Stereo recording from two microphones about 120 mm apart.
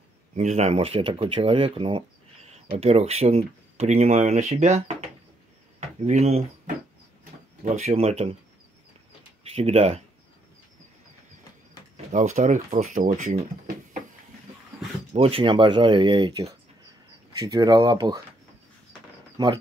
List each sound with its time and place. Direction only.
0.4 s speech: 75° right (ahead or behind); by 2.0 s 45° right (ahead or behind)
2.4 s speech: 65° right (ahead or behind)
7.6 s speech: 60° right (ahead or behind)
9.4 s speech: 60° right (ahead or behind)
12.1 s speech: 85° right
15.1 s speech: 50° right (ahead or behind); by 18.2 s 35° right (ahead or behind)
19.3 s speech: 35° right (ahead or behind)